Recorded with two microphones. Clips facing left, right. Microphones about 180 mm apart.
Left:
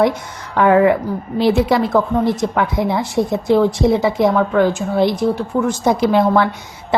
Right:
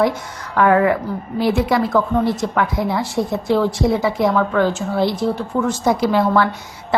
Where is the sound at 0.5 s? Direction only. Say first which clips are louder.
Left 2 dB; 20° left (ahead or behind).